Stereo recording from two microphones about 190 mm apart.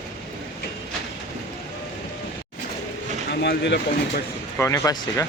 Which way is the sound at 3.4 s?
65° left (ahead or behind).